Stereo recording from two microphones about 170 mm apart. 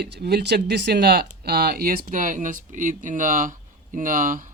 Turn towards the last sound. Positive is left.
turn(degrees=-55)  # may be behind; listen again after turning